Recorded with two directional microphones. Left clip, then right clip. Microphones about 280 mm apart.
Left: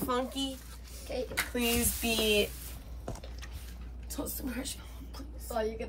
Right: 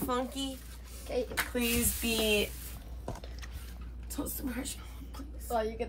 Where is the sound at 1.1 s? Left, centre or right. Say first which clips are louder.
Right 3 dB; right.